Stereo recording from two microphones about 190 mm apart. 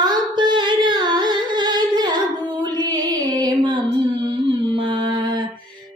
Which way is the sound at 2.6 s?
20° right (ahead or behind).